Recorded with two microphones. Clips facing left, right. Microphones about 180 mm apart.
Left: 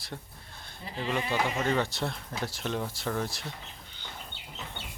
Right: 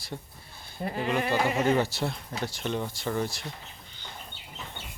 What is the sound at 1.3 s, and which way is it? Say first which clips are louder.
Speech: right 4 dB; 5° right (ahead or behind).